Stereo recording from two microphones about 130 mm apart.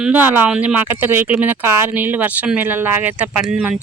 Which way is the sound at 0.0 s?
10° right (ahead or behind).